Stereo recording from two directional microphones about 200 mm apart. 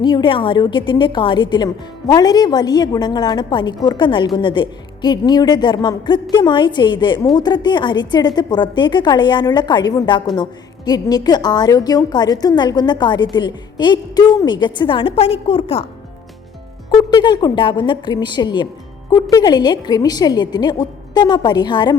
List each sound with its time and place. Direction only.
0.0 s a woman's voice: 25° left (ahead or behind)
17.0 s a woman's voice: 20° left (ahead or behind)